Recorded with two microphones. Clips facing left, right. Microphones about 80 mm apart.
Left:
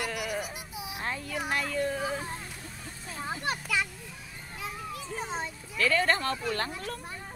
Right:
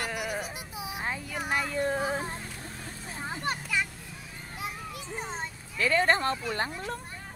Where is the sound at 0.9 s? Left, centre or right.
Centre.